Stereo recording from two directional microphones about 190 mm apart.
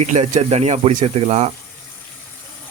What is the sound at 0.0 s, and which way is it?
Speech, 35° right (ahead or behind).